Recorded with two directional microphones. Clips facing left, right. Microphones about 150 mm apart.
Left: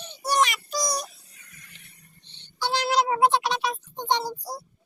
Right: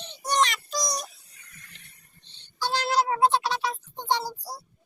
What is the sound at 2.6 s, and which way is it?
Music, 15° left (ahead or behind).